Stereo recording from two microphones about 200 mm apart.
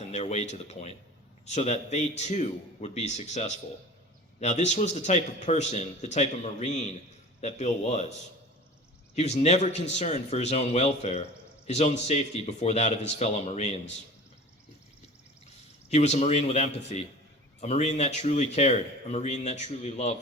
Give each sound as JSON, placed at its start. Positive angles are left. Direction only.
{"t": 0.1, "sound": "a man's voice", "side_deg": 35}
{"t": 9.1, "sound": "a man's voice", "side_deg": 35}
{"t": 15.9, "sound": "a man's voice", "side_deg": 35}